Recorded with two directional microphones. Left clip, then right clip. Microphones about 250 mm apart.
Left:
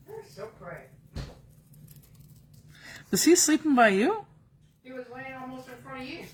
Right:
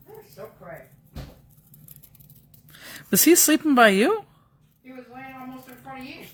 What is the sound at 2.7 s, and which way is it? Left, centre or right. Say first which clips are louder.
Speech: right 5 dB; right.